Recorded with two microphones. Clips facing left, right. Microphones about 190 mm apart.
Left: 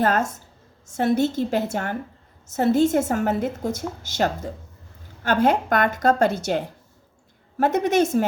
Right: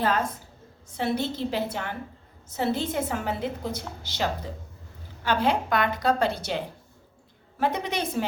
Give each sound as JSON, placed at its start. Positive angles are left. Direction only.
{"t": 0.0, "sound": "a woman's voice", "side_deg": 45}